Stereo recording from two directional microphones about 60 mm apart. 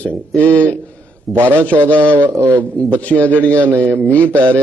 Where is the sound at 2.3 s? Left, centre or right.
Right.